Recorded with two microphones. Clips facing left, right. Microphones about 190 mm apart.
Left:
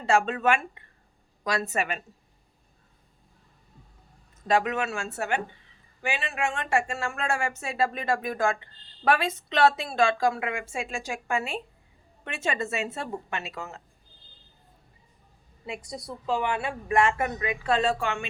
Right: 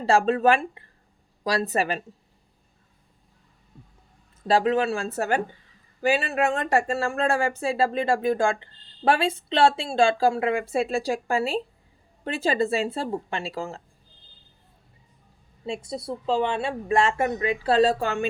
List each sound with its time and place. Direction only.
0.0 s speech: 35° right (ahead or behind)
4.4 s speech: 30° right (ahead or behind)
15.6 s speech: 30° right (ahead or behind)